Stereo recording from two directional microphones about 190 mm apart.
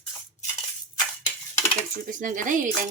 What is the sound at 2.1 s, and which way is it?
Speech, 45° right (ahead or behind).